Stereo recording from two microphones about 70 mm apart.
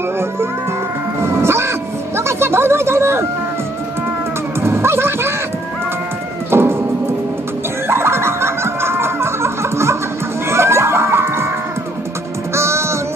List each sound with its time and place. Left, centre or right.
1.2 s cat: right
4.6 s music: right
6.5 s music: right
7.9 s a sound: right
10.5 s music: right
12.5 s music: right